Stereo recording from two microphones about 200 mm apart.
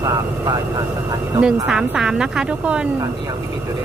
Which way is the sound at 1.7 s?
5° right (ahead or behind).